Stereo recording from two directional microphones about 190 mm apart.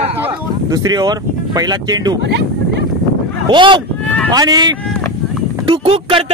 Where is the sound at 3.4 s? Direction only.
25° right (ahead or behind).